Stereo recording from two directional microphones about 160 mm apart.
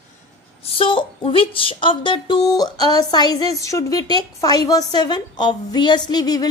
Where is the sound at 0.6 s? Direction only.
35° left (ahead or behind).